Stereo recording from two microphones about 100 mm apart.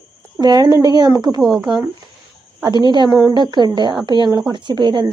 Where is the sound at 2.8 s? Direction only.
50° right (ahead or behind).